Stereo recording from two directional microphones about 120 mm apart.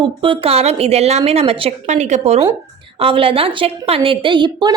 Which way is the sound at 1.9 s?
70° right (ahead or behind).